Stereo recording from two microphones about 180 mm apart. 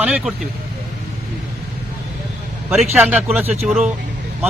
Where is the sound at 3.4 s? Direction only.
35° right (ahead or behind).